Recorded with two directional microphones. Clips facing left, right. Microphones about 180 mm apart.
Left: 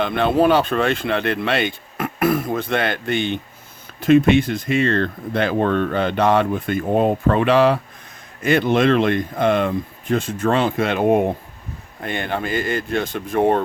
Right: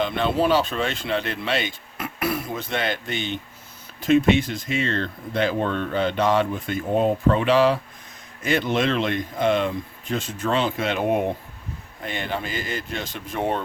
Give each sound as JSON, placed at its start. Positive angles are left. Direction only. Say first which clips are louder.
{"t": 0.0, "sound": "speech", "louder": "left 5 dB", "side_deg": 55}